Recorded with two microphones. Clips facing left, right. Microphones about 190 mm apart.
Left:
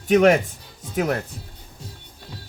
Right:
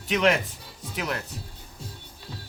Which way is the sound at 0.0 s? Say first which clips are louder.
Left 8 dB; 50° left (ahead or behind).